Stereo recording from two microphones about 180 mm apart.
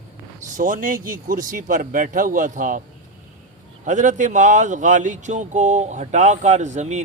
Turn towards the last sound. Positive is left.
turn(degrees=-40)  # may be behind; listen again after turning